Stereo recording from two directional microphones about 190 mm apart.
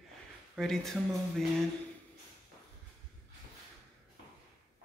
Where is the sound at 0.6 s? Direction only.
Centre (ahead or behind).